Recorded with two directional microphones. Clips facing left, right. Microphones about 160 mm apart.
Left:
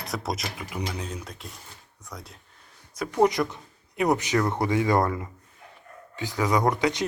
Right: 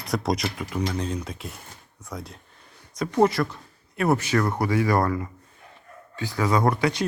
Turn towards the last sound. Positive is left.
turn(degrees=20)  # may be behind; listen again after turning